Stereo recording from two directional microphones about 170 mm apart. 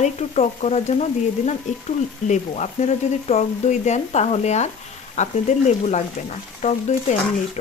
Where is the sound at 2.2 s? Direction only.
45° left (ahead or behind).